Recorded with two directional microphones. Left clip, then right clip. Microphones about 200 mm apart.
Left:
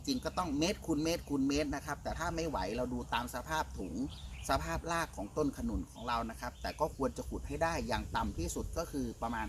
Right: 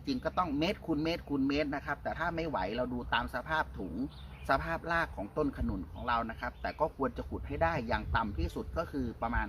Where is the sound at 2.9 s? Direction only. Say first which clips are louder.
Right 4 dB; 15° right (ahead or behind).